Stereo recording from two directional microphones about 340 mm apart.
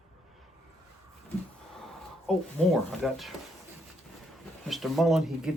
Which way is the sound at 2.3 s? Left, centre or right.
Centre.